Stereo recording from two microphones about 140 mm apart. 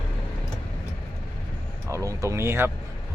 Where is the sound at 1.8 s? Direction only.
20° right (ahead or behind).